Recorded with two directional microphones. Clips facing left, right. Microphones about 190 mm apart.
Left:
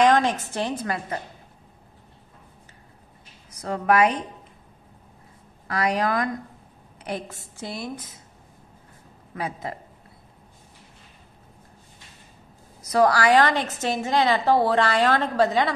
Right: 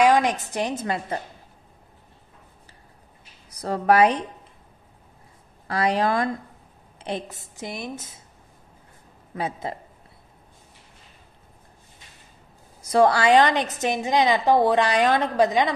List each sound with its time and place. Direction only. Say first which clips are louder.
0.0 s a woman's voice: even; 10° right (ahead or behind)
3.6 s speech: right 2 dB; 35° right (ahead or behind)
5.7 s a woman's voice: right 2 dB; 30° right (ahead or behind)
9.3 s a woman's voice: right 2 dB; 25° right (ahead or behind)
12.8 s a woman's voice: right 1 dB; 25° right (ahead or behind)